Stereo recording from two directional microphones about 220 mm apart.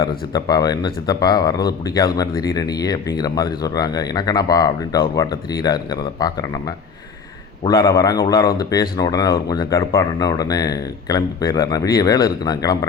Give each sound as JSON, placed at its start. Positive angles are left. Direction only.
{"t": 0.3, "sound": "speech", "side_deg": 15}